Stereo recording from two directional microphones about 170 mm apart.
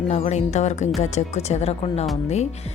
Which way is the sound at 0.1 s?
40° left (ahead or behind).